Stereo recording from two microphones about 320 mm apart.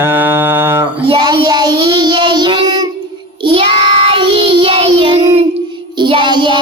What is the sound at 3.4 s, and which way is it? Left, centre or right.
Child singing, centre.